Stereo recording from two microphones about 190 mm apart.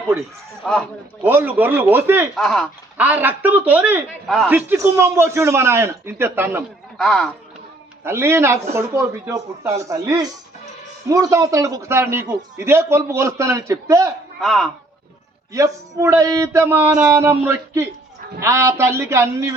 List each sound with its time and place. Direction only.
0.6 s speech: 5° left (ahead or behind)
1.2 s speech: 10° right (ahead or behind)
2.3 s speech: centre (ahead or behind)
3.0 s speech: 10° right (ahead or behind)
7.0 s speech: 5° left (ahead or behind)
8.0 s speech: 15° right (ahead or behind)
14.4 s speech: centre (ahead or behind)
15.5 s speech: 15° right (ahead or behind)